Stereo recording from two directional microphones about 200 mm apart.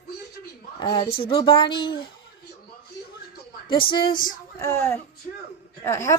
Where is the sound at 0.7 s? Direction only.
25° left (ahead or behind).